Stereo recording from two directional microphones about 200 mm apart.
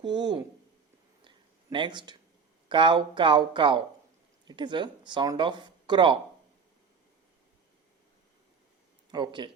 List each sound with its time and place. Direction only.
0.0 s speech: 20° right (ahead or behind)
1.2 s a sound: 25° right (ahead or behind)
2.6 s speech: 25° right (ahead or behind)
9.1 s speech: 25° right (ahead or behind)